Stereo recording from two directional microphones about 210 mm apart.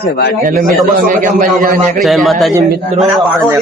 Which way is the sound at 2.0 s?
Centre (ahead or behind).